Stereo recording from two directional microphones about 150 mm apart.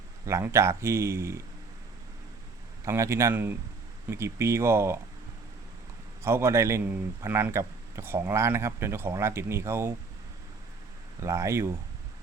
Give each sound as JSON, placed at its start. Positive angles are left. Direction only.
{"t": 0.3, "sound": "speech", "side_deg": -20}
{"t": 2.8, "sound": "speech", "side_deg": -20}
{"t": 6.2, "sound": "speech", "side_deg": -20}
{"t": 11.2, "sound": "speech", "side_deg": -20}